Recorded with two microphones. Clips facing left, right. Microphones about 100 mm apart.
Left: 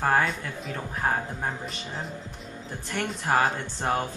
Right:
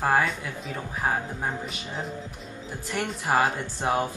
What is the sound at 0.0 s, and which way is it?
Speech, 5° right (ahead or behind).